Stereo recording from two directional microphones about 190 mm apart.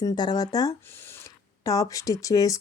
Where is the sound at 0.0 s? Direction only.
20° left (ahead or behind).